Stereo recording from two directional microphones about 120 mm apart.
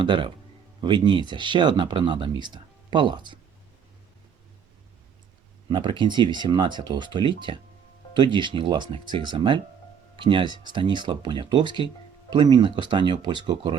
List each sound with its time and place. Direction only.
0.0 s speech: 45° right (ahead or behind)
5.6 s speech: 40° right (ahead or behind)